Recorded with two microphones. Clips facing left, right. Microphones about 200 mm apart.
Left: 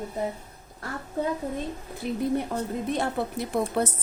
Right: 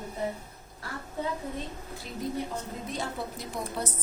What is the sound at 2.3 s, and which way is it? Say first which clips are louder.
A woman's voice: left 7 dB; 60° left (ahead or behind).